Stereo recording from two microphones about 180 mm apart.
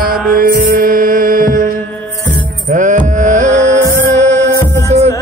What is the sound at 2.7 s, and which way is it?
Music, 45° right (ahead or behind).